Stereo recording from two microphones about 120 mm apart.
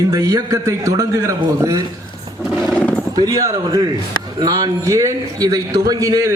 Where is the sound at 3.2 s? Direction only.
30° right (ahead or behind).